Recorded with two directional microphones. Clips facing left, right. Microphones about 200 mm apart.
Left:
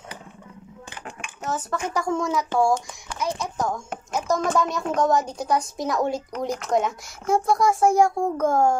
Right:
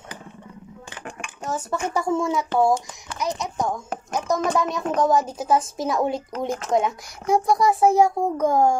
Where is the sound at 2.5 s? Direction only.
20° right (ahead or behind).